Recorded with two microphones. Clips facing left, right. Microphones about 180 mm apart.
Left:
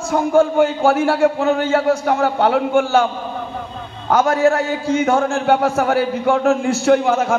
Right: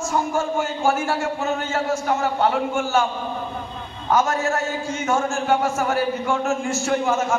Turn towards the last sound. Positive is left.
turn(degrees=60)  # may be behind; listen again after turning